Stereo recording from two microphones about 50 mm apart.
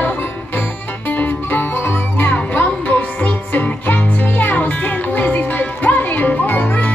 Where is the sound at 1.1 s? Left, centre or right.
Left.